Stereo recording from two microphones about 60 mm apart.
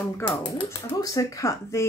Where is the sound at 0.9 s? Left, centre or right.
Left.